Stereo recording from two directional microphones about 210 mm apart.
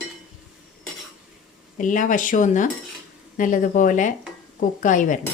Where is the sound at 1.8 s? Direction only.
40° left (ahead or behind).